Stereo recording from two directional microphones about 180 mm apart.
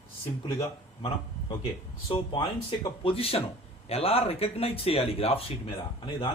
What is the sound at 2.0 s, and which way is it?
A man's voice, 30° left (ahead or behind).